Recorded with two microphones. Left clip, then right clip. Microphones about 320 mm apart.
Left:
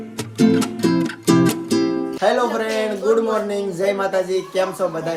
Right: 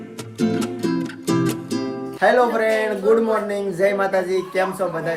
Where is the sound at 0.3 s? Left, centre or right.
Centre.